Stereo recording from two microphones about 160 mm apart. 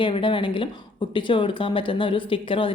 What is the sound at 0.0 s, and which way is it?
Speech, 30° left (ahead or behind).